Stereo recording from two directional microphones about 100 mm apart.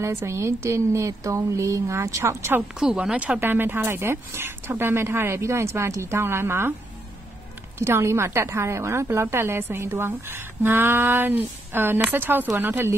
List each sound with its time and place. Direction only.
0.0 s a woman's voice: 30° right (ahead or behind)
2.8 s a woman's voice: 10° right (ahead or behind); by 6.7 s 25° right (ahead or behind)
7.8 s a woman's voice: 25° right (ahead or behind)